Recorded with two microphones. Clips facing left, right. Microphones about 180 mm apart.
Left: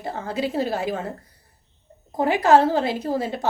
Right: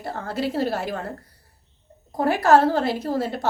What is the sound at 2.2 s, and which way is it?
A woman's voice, 15° left (ahead or behind).